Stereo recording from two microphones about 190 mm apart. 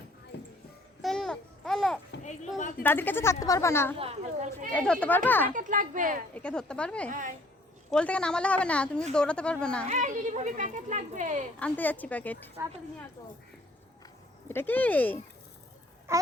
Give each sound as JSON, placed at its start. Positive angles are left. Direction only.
{"t": 0.3, "sound": "music", "side_deg": 65}
{"t": 1.0, "sound": "babbling", "side_deg": 0}
{"t": 2.6, "sound": "a sound", "side_deg": 45}
{"t": 2.8, "sound": "a woman's voice", "side_deg": 10}
{"t": 3.9, "sound": "speech", "side_deg": -30}
{"t": 4.7, "sound": "a woman's voice", "side_deg": 10}
{"t": 5.5, "sound": "speech", "side_deg": -45}
{"t": 6.3, "sound": "a woman's voice", "side_deg": 5}
{"t": 7.1, "sound": "speech", "side_deg": -40}
{"t": 7.9, "sound": "a woman's voice", "side_deg": 5}
{"t": 9.9, "sound": "speech", "side_deg": -40}
{"t": 11.6, "sound": "a woman's voice", "side_deg": 10}
{"t": 14.4, "sound": "speech", "side_deg": 10}
{"t": 16.1, "sound": "speech", "side_deg": -15}